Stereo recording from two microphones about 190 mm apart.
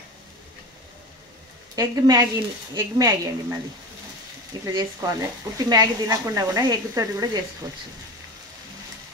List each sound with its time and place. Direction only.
1.8 s a woman's voice: 20° right (ahead or behind)
4.6 s a woman's voice: 20° right (ahead or behind)